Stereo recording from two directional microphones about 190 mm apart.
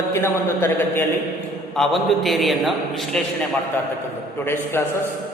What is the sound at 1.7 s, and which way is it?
A man's voice, centre (ahead or behind).